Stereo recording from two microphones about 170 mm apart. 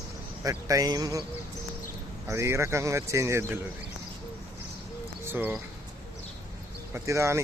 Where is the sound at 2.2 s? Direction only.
15° right (ahead or behind).